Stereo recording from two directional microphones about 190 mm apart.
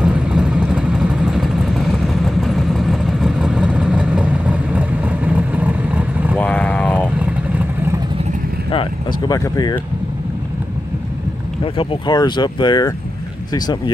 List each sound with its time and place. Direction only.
0.0 s vehicle: 5° right (ahead or behind)
6.3 s vehicle: 5° left (ahead or behind)
7.2 s vehicle: 5° right (ahead or behind)
9.3 s speech: 20° left (ahead or behind)
11.6 s speech: 30° left (ahead or behind)